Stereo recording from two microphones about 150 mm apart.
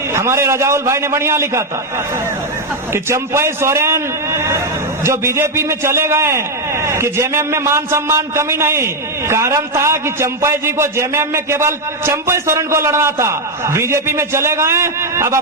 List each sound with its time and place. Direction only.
0.1 s a man's voice: 20° right (ahead or behind)
2.9 s a man's voice: 15° right (ahead or behind)